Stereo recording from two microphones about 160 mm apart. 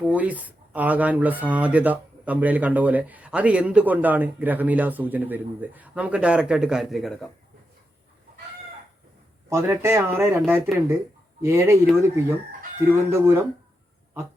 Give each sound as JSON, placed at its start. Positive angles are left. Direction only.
{"t": 0.0, "sound": "speech", "side_deg": -10}
{"t": 9.5, "sound": "speech", "side_deg": -15}